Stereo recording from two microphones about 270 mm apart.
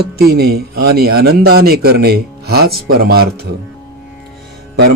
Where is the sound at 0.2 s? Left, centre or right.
Right.